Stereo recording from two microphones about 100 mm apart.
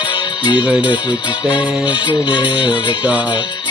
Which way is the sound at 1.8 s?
50° left (ahead or behind).